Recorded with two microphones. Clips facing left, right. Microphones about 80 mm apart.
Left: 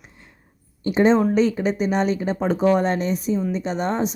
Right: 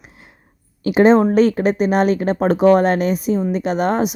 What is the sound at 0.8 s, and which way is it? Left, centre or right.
A woman's voice, right.